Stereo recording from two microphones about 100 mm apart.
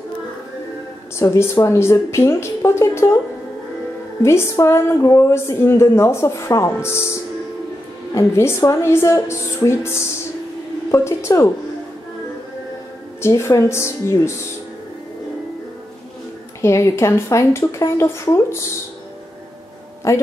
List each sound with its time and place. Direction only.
1.1 s a woman's voice: 30° left (ahead or behind)
4.2 s a woman's voice: 30° left (ahead or behind)
13.2 s a woman's voice: 30° left (ahead or behind)
16.6 s a woman's voice: 30° left (ahead or behind)
20.1 s a woman's voice: 30° left (ahead or behind)